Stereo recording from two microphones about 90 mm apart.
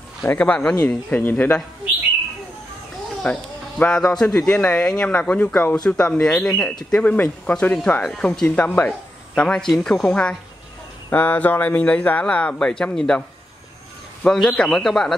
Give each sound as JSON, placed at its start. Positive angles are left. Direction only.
{"t": 0.2, "sound": "speech", "side_deg": 15}
{"t": 3.3, "sound": "a man's voice", "side_deg": 15}
{"t": 9.7, "sound": "a man's voice", "side_deg": 0}
{"t": 10.0, "sound": "speech", "side_deg": 15}
{"t": 14.2, "sound": "a man's voice", "side_deg": 5}